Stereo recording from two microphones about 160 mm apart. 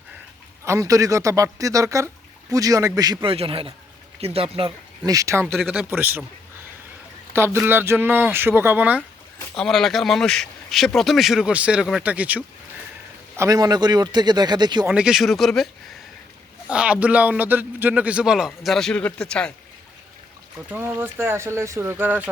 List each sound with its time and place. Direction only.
0.6 s speech: 20° right (ahead or behind)
3.3 s speech: 35° right (ahead or behind)
5.0 s a man's voice: 20° right (ahead or behind)
5.5 s speech: centre (ahead or behind)
5.9 s a man's voice: 15° right (ahead or behind)
7.3 s a man's voice: 15° right (ahead or behind)
9.6 s speech: centre (ahead or behind)
13.3 s speech: 20° right (ahead or behind)
14.8 s a man's voice: 5° right (ahead or behind)
20.7 s a man's voice: 15° right (ahead or behind)